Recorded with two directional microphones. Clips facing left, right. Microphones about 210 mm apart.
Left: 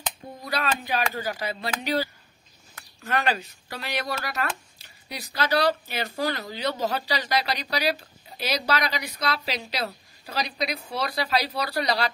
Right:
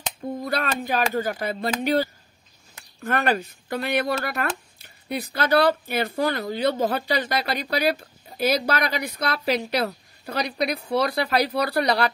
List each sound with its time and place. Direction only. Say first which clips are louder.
0.4 s speech: right 1 dB; 50° right (ahead or behind)
3.0 s a woman's voice: right 3 dB; 55° right (ahead or behind)